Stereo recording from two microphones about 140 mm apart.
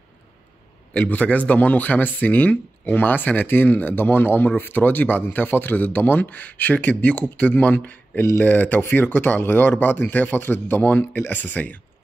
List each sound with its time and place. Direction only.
0.9 s speech: 10° left (ahead or behind)